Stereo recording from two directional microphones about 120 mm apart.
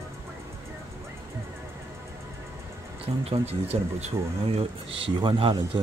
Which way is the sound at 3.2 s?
60° right (ahead or behind).